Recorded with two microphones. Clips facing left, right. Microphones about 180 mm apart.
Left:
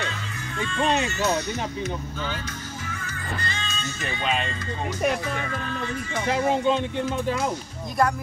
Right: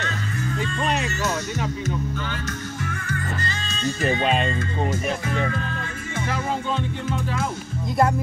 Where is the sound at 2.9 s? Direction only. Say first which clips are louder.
Right 4 dB; 50° right (ahead or behind).